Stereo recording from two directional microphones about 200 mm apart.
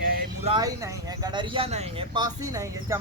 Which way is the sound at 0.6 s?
15° right (ahead or behind).